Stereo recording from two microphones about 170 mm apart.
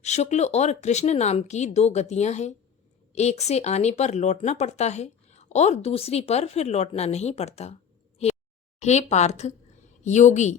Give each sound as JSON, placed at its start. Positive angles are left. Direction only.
{"t": 0.0, "sound": "speech", "side_deg": 40}
{"t": 8.8, "sound": "speech", "side_deg": 40}